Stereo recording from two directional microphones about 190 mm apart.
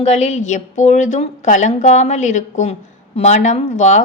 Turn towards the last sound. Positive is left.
turn(degrees=40)  # may be behind; listen again after turning